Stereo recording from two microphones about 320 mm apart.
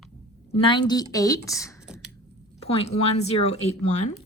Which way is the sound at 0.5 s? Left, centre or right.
Centre.